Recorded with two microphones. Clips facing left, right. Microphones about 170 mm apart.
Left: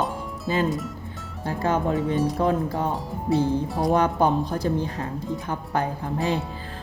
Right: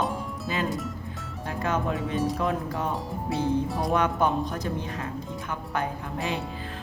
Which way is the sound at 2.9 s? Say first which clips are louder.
Left 5 dB; centre (ahead or behind).